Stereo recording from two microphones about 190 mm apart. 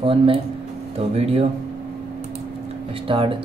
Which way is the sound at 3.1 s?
25° right (ahead or behind).